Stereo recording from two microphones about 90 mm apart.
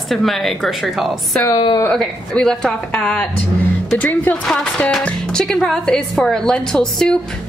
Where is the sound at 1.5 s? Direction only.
50° left (ahead or behind).